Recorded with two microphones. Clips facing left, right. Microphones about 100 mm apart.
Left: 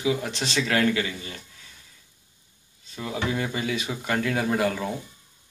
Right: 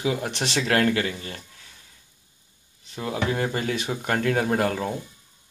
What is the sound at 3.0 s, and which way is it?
Speech, 50° right (ahead or behind).